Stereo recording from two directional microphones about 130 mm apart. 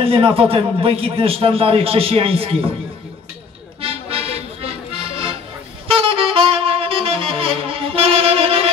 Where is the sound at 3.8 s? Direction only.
45° right (ahead or behind).